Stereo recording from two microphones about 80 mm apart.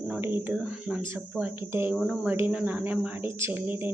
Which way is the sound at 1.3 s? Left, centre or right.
Right.